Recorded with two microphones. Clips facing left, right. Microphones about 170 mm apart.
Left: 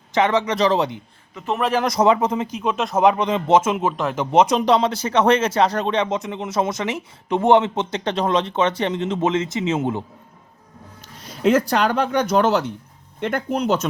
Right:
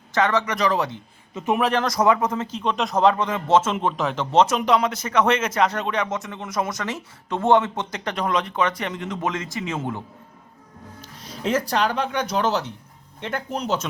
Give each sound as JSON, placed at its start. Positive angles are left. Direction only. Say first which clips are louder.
{"t": 0.1, "sound": "a man's voice", "louder": "left 3 dB", "side_deg": 20}
{"t": 3.1, "sound": "a man's voice", "louder": "left 3 dB", "side_deg": 20}
{"t": 4.5, "sound": "speech", "louder": "left 3 dB", "side_deg": 30}
{"t": 11.4, "sound": "speech", "louder": "left 5 dB", "side_deg": 60}